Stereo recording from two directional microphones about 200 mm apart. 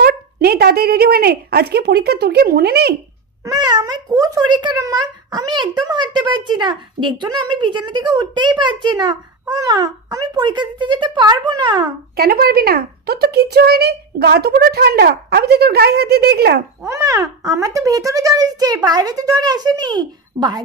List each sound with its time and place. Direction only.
0.0 s a child's voice: 50° right (ahead or behind)
3.4 s speech: 20° right (ahead or behind)
12.2 s a child's voice: 50° right (ahead or behind)
16.8 s a child's voice: 15° right (ahead or behind)